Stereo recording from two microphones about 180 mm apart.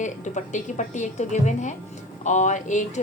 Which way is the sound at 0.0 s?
45° left (ahead or behind).